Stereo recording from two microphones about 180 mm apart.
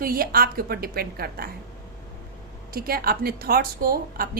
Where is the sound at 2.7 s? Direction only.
55° right (ahead or behind).